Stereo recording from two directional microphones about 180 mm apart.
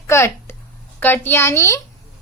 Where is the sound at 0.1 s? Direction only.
15° left (ahead or behind).